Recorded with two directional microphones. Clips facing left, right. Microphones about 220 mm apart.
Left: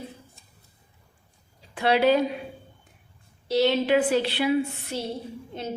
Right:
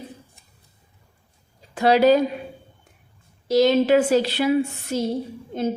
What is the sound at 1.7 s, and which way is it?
Speech, 40° right (ahead or behind).